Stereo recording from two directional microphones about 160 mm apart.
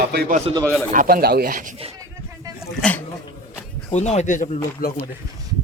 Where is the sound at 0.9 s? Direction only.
65° right (ahead or behind).